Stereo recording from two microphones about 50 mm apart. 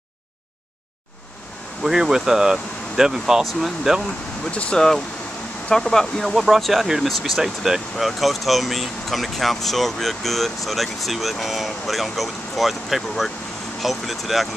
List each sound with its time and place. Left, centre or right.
1.8 s speech: centre
4.5 s speech: left
4.7 s speech: centre
6.3 s speech: centre